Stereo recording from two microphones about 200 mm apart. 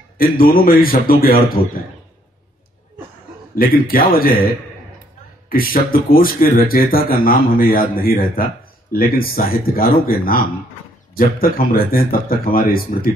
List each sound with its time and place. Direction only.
0.2 s speech: 45° left (ahead or behind)
3.5 s speech: 45° left (ahead or behind)
5.5 s speech: 45° left (ahead or behind)